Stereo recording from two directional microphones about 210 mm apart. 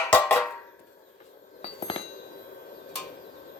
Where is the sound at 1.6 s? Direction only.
25° left (ahead or behind).